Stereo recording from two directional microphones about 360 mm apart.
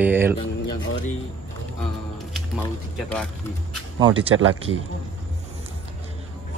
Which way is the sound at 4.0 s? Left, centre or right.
Centre.